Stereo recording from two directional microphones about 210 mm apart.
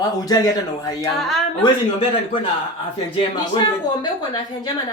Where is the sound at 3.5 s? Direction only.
25° left (ahead or behind).